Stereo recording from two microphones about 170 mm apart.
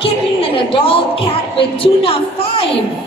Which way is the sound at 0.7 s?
35° left (ahead or behind).